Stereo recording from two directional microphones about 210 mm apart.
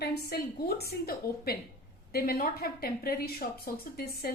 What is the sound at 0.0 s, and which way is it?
A woman's voice, 50° left (ahead or behind).